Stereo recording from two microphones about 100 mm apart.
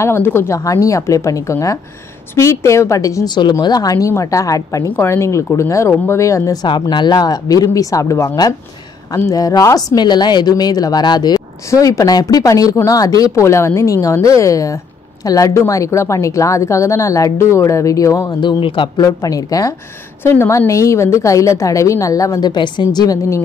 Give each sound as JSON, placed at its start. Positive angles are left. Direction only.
{"t": 0.0, "sound": "speech", "side_deg": 25}
{"t": 3.3, "sound": "speech", "side_deg": 45}
{"t": 18.4, "sound": "a man's voice", "side_deg": 55}
{"t": 18.9, "sound": "speech", "side_deg": 35}
{"t": 20.2, "sound": "speech", "side_deg": 25}